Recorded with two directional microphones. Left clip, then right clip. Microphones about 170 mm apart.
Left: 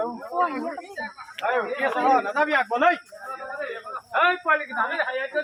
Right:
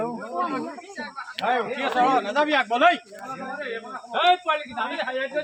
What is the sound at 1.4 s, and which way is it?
Speech, 70° right (ahead or behind).